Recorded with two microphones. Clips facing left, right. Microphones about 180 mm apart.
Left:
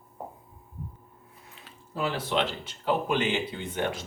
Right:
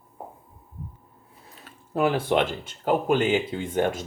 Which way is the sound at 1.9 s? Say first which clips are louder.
Right 6 dB; 55° right (ahead or behind).